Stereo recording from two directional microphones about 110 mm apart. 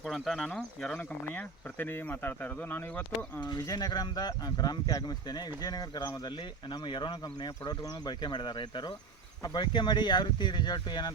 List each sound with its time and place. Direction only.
0.0 s speech: centre (ahead or behind)
1.3 s speech: 15° left (ahead or behind)
3.6 s speech: 35° left (ahead or behind)